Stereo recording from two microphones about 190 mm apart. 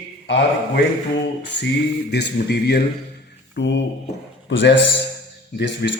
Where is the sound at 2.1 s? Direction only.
60° left (ahead or behind).